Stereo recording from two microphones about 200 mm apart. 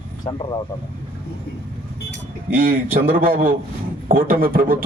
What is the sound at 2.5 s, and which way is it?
A man's voice, 45° right (ahead or behind).